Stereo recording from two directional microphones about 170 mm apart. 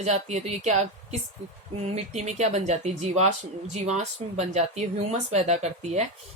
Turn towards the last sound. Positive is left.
turn(degrees=-40)  # may be behind; listen again after turning